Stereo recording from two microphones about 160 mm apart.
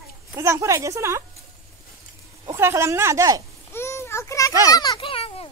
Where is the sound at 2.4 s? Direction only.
15° right (ahead or behind).